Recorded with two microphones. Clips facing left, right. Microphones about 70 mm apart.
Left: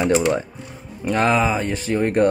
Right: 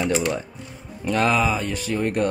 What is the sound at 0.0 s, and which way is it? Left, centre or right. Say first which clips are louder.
Speech: left 5 dB; left.